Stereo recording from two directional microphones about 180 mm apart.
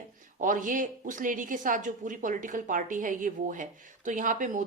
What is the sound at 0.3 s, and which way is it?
A woman's voice, 45° right (ahead or behind).